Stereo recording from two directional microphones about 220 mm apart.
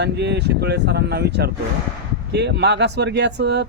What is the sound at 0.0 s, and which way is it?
Speech, 50° right (ahead or behind).